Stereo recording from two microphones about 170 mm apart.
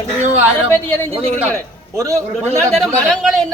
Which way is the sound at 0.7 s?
15° left (ahead or behind).